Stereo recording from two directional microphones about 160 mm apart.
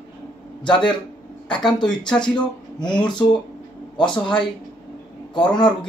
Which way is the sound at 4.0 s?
5° left (ahead or behind).